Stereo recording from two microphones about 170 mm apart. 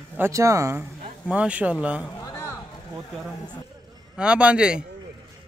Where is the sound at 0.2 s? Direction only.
15° right (ahead or behind).